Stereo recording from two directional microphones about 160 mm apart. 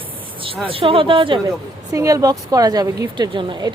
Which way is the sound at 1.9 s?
20° right (ahead or behind).